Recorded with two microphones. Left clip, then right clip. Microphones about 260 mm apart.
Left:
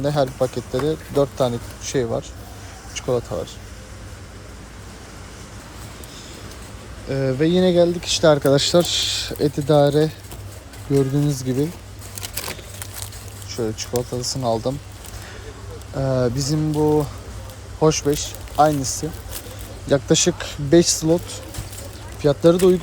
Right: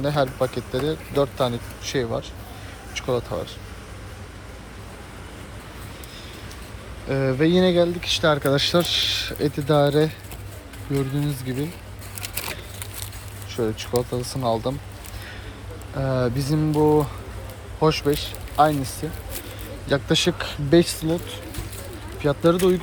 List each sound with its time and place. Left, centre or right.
0.0 s speech: centre
7.1 s speech: centre
13.5 s speech: centre
16.0 s speech: centre
16.5 s speech: centre